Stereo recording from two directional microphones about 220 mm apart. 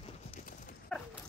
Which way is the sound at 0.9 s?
5° left (ahead or behind).